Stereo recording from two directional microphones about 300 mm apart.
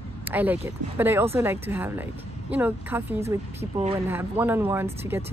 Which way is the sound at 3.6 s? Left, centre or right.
Right.